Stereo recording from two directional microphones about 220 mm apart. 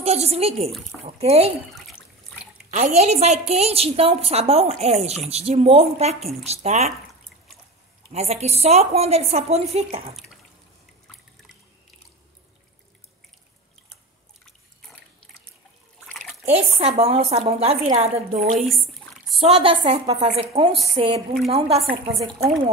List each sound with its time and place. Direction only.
0.0 s a woman's voice: 30° right (ahead or behind)
2.7 s a woman's voice: 30° right (ahead or behind)
8.1 s a woman's voice: 30° right (ahead or behind)
14.4 s trickle: centre (ahead or behind)
16.4 s a woman's voice: 30° right (ahead or behind)
19.4 s a woman's voice: 25° right (ahead or behind)